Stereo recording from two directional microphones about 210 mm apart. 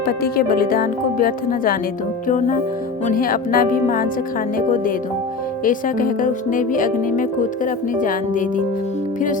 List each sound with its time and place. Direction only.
0.2 s speech: 45° left (ahead or behind)
5.6 s speech: 40° left (ahead or behind)